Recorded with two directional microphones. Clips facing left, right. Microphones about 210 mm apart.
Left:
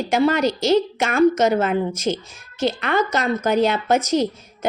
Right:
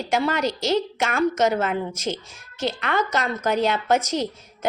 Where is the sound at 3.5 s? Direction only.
10° left (ahead or behind).